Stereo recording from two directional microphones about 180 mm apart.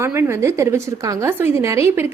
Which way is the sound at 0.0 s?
15° right (ahead or behind).